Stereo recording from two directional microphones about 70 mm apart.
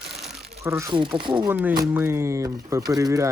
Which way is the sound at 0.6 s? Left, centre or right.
Right.